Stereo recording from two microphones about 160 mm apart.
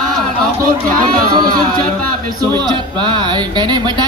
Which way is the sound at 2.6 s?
30° right (ahead or behind).